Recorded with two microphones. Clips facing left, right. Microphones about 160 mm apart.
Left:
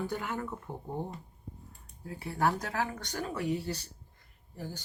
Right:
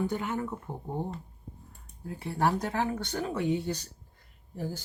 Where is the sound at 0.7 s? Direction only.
15° right (ahead or behind).